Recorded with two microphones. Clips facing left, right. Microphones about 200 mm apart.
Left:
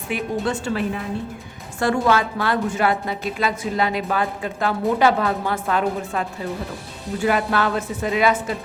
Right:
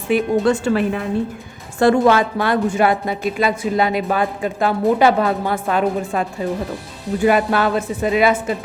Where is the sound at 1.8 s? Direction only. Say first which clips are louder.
Right 6 dB; 25° right (ahead or behind).